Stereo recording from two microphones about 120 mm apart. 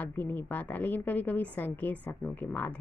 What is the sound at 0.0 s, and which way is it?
Speech, 15° left (ahead or behind).